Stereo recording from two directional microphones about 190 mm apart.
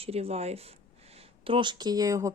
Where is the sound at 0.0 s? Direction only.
30° right (ahead or behind).